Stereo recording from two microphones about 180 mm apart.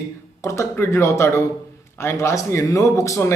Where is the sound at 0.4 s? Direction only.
15° left (ahead or behind).